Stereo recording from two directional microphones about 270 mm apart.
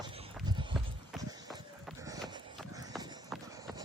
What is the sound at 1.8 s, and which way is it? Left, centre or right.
Run, centre.